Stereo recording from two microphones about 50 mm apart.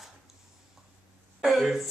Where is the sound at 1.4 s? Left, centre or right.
Centre.